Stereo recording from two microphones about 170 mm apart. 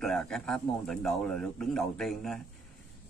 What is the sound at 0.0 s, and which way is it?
Speech, 5° left (ahead or behind).